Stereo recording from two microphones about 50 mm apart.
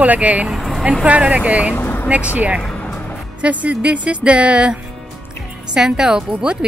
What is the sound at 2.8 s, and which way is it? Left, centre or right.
Music, left.